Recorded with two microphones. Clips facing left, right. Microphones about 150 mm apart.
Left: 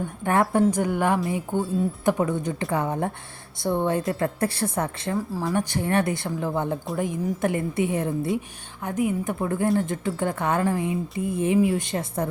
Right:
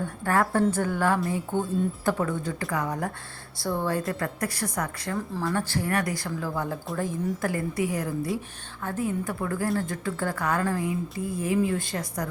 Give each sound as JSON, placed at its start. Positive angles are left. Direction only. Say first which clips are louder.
{"t": 0.0, "sound": "speech", "louder": "left 2 dB", "side_deg": 20}